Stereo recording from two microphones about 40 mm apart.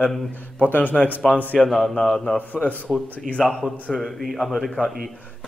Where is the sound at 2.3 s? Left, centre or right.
Left.